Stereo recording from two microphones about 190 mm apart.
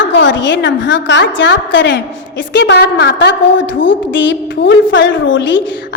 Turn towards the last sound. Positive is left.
turn(degrees=70)  # may be behind; listen again after turning